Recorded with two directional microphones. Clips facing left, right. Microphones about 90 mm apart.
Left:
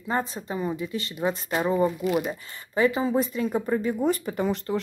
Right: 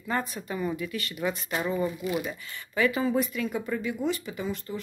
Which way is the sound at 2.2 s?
30° left (ahead or behind).